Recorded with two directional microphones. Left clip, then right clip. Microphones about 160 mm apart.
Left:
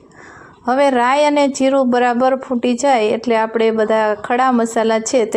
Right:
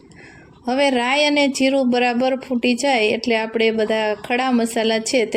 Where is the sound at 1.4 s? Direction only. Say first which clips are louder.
Left 3 dB; 5° right (ahead or behind).